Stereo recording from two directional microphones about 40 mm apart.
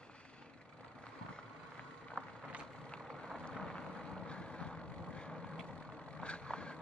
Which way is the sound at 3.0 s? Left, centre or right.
Centre.